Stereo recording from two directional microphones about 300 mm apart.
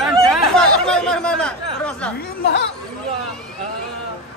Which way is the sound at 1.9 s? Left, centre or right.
Centre.